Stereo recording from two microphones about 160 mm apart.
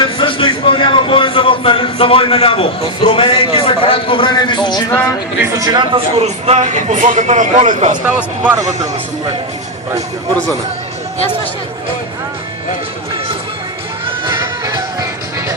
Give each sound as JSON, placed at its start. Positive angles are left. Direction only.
{"t": 0.0, "sound": "speech", "side_deg": 30}
{"t": 5.5, "sound": "a man's voice", "side_deg": -25}
{"t": 8.0, "sound": "speech", "side_deg": -10}
{"t": 8.5, "sound": "speech", "side_deg": -20}
{"t": 14.3, "sound": "music", "side_deg": -20}